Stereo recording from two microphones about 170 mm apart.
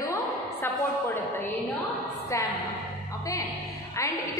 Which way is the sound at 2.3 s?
20° left (ahead or behind).